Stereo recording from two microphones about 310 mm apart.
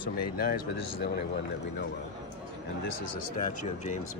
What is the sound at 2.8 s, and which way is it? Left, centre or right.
Speech, left.